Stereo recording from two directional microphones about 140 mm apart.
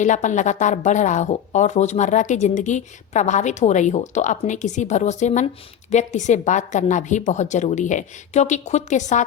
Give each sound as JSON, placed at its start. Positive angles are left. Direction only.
{"t": 0.0, "sound": "a woman's voice", "side_deg": 60}